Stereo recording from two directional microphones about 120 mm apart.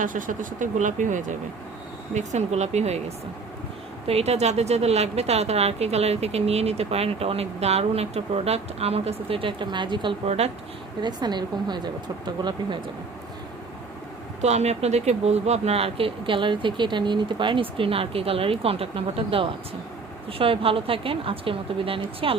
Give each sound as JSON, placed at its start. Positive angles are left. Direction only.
{"t": 0.0, "sound": "speech", "side_deg": -90}
{"t": 2.1, "sound": "speech", "side_deg": -70}
{"t": 4.0, "sound": "a woman's voice", "side_deg": -60}
{"t": 10.2, "sound": "a woman's voice", "side_deg": -60}
{"t": 11.0, "sound": "speech", "side_deg": -35}
{"t": 14.4, "sound": "speech", "side_deg": -65}